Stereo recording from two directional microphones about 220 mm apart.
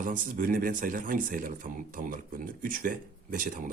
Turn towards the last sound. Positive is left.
turn(degrees=-40)  # may be behind; listen again after turning